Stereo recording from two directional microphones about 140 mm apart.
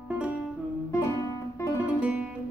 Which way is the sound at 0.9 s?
20° left (ahead or behind).